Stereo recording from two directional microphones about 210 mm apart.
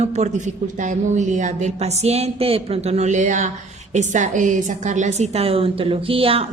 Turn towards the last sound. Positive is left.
turn(degrees=-25)  # may be behind; listen again after turning